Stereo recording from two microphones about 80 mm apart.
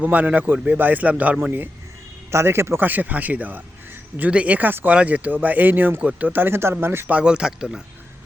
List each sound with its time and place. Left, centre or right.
0.0 s speech: centre
7.1 s speech: centre